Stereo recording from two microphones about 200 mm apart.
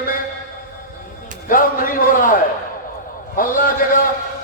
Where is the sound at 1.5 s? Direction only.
45° left (ahead or behind).